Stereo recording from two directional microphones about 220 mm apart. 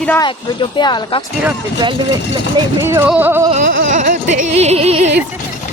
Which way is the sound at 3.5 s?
35° right (ahead or behind).